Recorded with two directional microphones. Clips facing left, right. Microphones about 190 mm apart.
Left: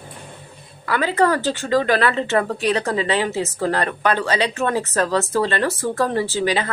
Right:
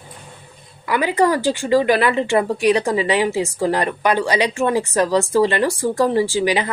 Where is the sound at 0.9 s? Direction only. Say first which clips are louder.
Right 1 dB; 15° right (ahead or behind).